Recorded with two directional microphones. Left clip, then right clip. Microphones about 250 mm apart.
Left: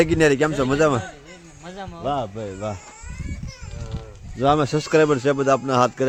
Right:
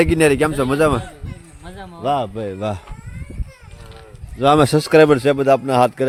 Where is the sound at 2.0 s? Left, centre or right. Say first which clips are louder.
Right 6 dB; right.